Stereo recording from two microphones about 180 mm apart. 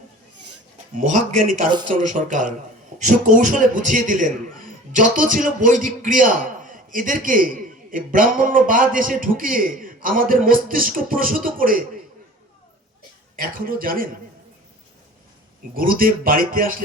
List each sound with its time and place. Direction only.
1.9 s a man's voice: 45° right (ahead or behind)
13.3 s a man's voice: 50° right (ahead or behind)
15.7 s a man's voice: 50° right (ahead or behind)